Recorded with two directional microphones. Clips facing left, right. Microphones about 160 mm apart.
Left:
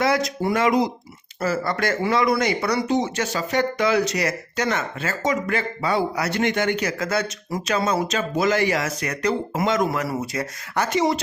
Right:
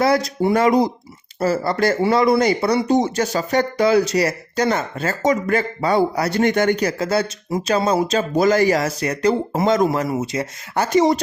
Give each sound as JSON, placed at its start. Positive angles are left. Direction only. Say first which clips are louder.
{"t": 0.0, "sound": "speech", "louder": "right 4 dB", "side_deg": -35}
{"t": 2.9, "sound": "speech", "louder": "right 5 dB", "side_deg": -40}
{"t": 10.8, "sound": "speech", "louder": "right 6 dB", "side_deg": -40}